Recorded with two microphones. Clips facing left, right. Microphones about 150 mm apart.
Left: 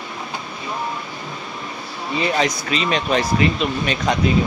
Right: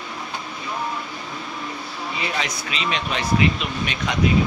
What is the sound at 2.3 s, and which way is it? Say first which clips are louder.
Speech: left 7 dB; 40° left (ahead or behind).